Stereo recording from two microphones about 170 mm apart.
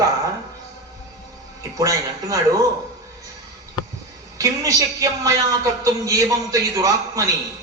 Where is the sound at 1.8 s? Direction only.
20° right (ahead or behind).